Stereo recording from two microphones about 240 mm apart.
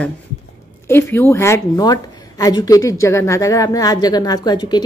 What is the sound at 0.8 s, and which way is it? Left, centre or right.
Speech, centre.